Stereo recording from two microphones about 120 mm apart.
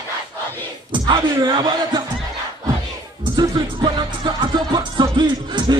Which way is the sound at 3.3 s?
35° right (ahead or behind).